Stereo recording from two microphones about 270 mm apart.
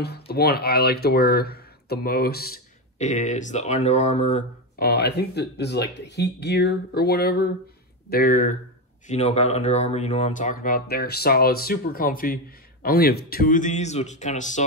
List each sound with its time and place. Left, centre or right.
0.0 s speech: left
4.8 s speech: left